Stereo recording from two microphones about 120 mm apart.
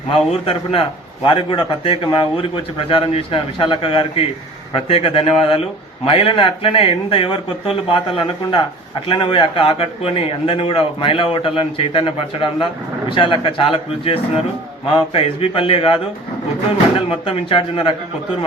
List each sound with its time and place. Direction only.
0.1 s a man's voice: 50° left (ahead or behind)
17.1 s a man's voice: 50° left (ahead or behind)